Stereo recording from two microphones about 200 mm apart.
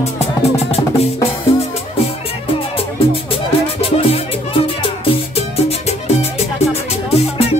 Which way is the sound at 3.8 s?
30° left (ahead or behind).